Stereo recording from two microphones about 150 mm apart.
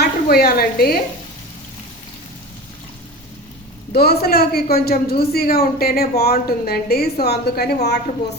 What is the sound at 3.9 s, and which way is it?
A woman's voice, 90° left.